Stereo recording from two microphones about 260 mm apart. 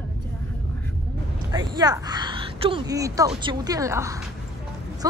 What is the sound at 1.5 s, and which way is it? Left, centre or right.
Speech, centre.